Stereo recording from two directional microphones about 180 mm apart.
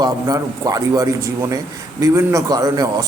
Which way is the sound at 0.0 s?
20° right (ahead or behind).